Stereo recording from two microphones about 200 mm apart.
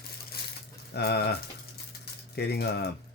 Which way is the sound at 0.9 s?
55° left (ahead or behind).